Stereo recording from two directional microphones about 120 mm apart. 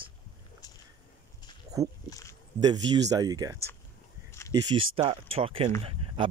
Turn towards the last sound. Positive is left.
turn(degrees=-50)  # may be behind; listen again after turning